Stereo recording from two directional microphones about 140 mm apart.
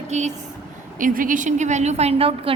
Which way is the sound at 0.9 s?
75° right (ahead or behind).